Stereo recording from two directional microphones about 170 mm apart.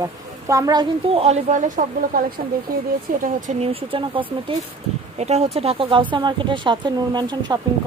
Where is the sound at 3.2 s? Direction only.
40° right (ahead or behind); by 7.5 s 25° right (ahead or behind).